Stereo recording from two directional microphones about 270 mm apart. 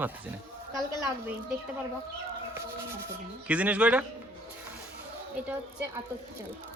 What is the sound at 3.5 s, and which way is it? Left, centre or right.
Speech, centre.